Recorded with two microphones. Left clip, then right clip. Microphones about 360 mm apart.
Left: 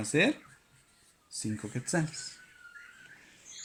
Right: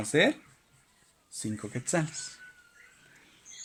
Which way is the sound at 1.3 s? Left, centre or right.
Right.